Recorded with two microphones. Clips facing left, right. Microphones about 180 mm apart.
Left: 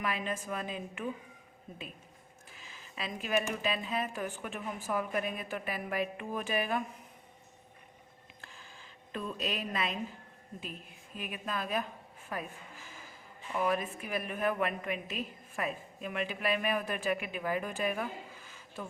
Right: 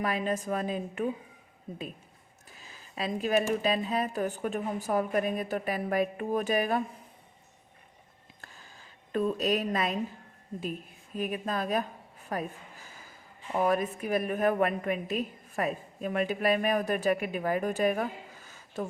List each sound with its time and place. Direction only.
0.0 s speech: 40° right (ahead or behind)
2.6 s speech: 40° right (ahead or behind)
8.4 s a sound: 45° right (ahead or behind)
10.6 s speech: 40° right (ahead or behind)
13.5 s a woman's voice: 40° right (ahead or behind)